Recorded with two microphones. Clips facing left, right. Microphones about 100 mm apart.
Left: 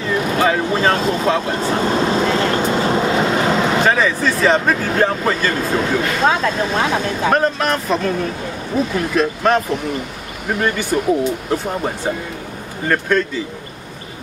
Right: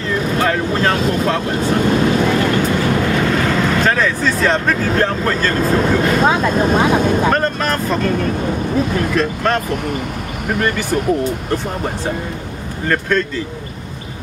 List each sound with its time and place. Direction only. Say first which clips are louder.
0.0 s speech: left 1 dB; 5° left (ahead or behind)
2.0 s vehicle: right 2 dB; 25° left (ahead or behind)
3.8 s speech: even; 5° left (ahead or behind)
7.2 s speech: even; 5° left (ahead or behind)
10.6 s speech: even; centre (ahead or behind)